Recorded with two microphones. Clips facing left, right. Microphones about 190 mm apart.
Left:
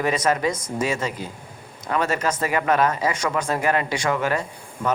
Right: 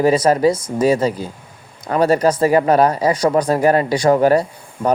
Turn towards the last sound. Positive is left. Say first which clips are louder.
# right 6 dB
turn(degrees=-40)  # may be behind; listen again after turning